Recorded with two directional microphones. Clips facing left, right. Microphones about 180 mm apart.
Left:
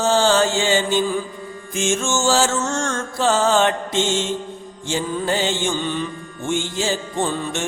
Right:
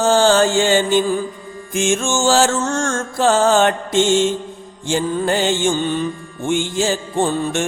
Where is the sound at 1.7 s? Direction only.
55° right (ahead or behind).